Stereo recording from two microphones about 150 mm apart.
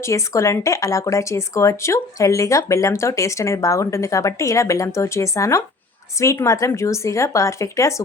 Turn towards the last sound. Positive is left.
turn(degrees=20)  # may be behind; listen again after turning